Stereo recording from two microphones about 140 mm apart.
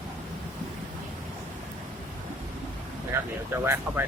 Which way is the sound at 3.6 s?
15° right (ahead or behind).